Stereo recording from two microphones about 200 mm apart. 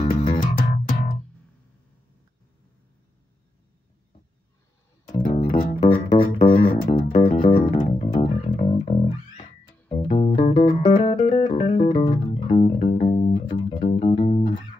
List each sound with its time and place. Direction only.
0.0 s music: 35° left (ahead or behind)
5.1 s music: 40° left (ahead or behind)
5.8 s music: 25° left (ahead or behind)
7.6 s bass guitar: 40° left (ahead or behind)
9.4 s music: 25° left (ahead or behind)
12.4 s bass guitar: 35° left (ahead or behind)
13.0 s music: 30° left (ahead or behind)